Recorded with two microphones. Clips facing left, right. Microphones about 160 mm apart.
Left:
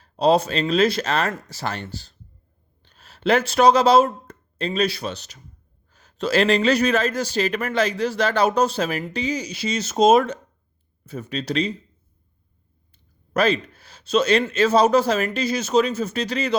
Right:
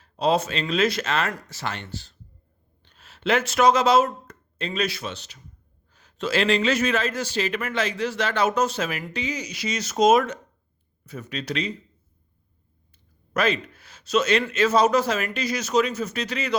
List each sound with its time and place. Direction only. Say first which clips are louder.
0.0 s speech: left 4 dB; 35° left (ahead or behind)
13.3 s speech: left 3 dB; 30° left (ahead or behind)